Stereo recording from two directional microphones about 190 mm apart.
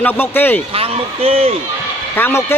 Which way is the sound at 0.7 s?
30° right (ahead or behind).